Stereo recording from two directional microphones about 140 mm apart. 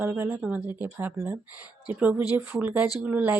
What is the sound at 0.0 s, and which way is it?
Speech, 15° right (ahead or behind).